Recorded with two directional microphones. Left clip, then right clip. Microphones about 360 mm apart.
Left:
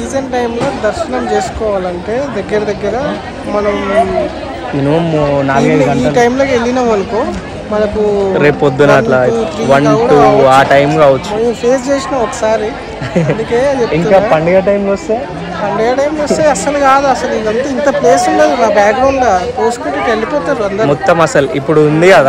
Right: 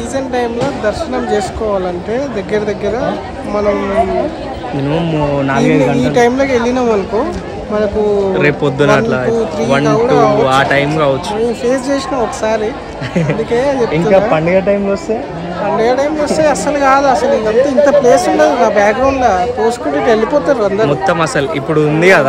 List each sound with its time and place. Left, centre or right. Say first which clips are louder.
0.1 s speech: left 1 dB; centre
5.0 s speech: left 3 dB; centre
8.4 s speech: left 3 dB; centre
13.1 s speech: left 2 dB; centre
15.8 s speech: left 1 dB; centre
20.1 s speech: right 3 dB; centre
20.8 s speech: left 3 dB; centre